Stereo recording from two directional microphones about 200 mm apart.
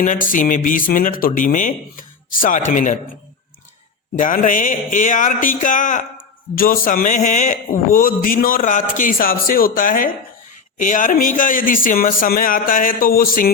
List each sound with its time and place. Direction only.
0.0 s a man's voice: 40° left (ahead or behind)
4.2 s a man's voice: 40° left (ahead or behind)